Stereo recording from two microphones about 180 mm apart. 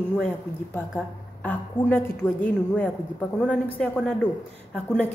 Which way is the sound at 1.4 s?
10° left (ahead or behind).